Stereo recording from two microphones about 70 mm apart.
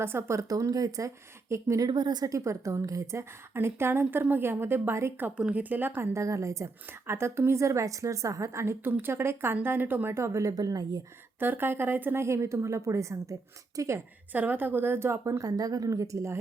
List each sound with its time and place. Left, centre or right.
0.0 s speech: right
1.8 s speech: right
2.3 s a woman's voice: right
5.4 s speech: right
6.1 s a woman's voice: right
10.5 s a woman's voice: right
11.3 s a woman's voice: right
12.2 s speech: right
14.3 s a woman's voice: right
15.2 s speech: right